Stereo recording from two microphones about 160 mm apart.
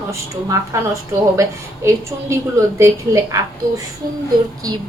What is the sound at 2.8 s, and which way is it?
Speech, 20° right (ahead or behind).